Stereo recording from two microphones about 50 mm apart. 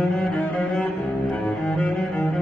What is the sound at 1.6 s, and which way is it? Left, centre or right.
Cello, centre.